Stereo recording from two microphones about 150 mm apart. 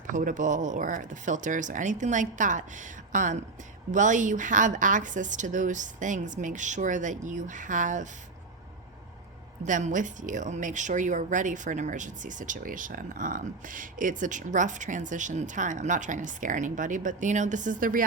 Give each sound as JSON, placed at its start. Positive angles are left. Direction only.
{"t": 0.1, "sound": "speech", "side_deg": -60}
{"t": 9.6, "sound": "speech", "side_deg": -60}